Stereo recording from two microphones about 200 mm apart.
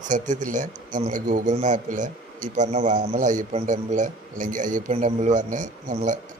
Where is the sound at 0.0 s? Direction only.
40° right (ahead or behind).